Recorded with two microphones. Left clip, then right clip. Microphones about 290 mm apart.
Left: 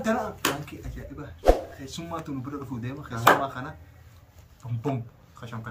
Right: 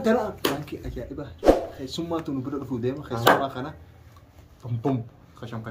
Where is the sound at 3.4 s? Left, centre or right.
Left.